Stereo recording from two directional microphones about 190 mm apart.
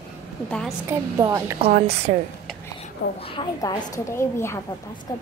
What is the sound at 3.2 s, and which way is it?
A woman's voice, 25° left (ahead or behind).